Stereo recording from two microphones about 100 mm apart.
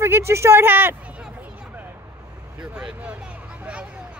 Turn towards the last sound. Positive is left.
turn(degrees=-10)  # may be behind; listen again after turning